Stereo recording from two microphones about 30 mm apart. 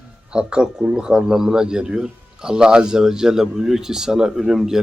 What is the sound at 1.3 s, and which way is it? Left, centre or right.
Speech, centre.